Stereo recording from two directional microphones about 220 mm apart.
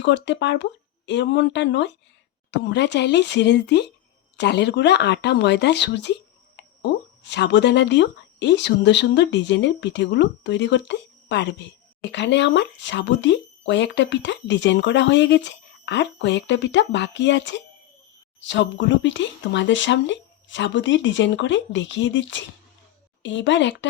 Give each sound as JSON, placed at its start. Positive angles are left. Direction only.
{"t": 0.0, "sound": "speech", "side_deg": 55}